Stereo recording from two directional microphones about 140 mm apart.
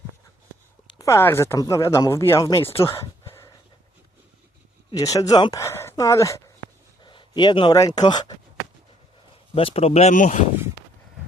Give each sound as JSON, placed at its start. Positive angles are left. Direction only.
{"t": 0.9, "sound": "speech", "side_deg": 20}
{"t": 4.9, "sound": "speech", "side_deg": 25}
{"t": 7.0, "sound": "a sound", "side_deg": 35}
{"t": 7.8, "sound": "speech", "side_deg": 30}
{"t": 9.6, "sound": "speech", "side_deg": 45}
{"t": 10.2, "sound": "speech", "side_deg": 60}